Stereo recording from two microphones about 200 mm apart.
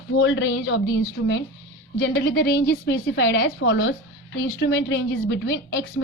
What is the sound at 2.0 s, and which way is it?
A woman's voice, 55° left (ahead or behind).